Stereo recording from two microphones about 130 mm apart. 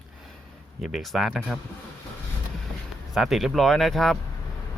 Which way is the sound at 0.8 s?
Centre (ahead or behind).